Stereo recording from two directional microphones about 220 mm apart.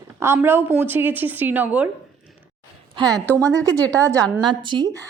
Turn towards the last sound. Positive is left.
turn(degrees=-20)  # may be behind; listen again after turning